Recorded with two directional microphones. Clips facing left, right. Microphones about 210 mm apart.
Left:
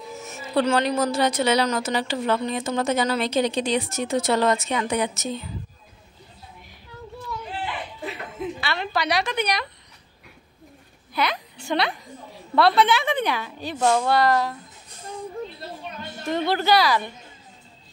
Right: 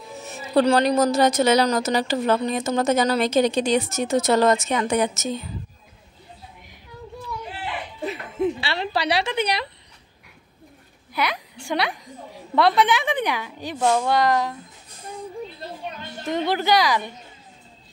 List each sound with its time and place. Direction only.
0.2 s a woman's voice: 35° right (ahead or behind)
8.5 s a woman's voice: 30° right (ahead or behind)
11.1 s a woman's voice: 10° right (ahead or behind)
16.3 s a woman's voice: 15° right (ahead or behind)